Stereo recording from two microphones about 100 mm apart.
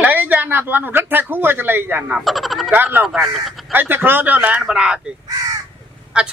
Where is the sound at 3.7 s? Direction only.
20° right (ahead or behind).